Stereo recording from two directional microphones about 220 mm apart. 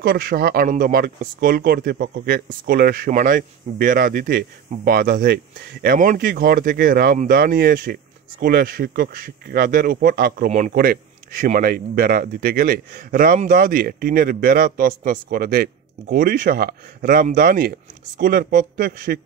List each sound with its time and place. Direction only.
0.0 s speech: 45° right (ahead or behind)